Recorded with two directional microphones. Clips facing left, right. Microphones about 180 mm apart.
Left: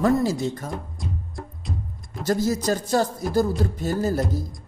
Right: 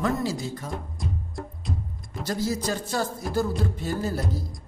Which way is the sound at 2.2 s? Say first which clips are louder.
Left 5 dB; 45° left (ahead or behind).